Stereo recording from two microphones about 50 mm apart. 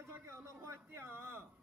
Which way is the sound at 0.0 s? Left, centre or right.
Right.